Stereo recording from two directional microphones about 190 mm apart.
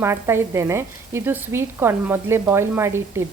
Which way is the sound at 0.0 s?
15° right (ahead or behind).